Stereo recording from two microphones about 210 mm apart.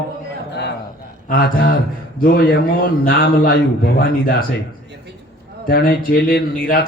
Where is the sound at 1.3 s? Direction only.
45° left (ahead or behind).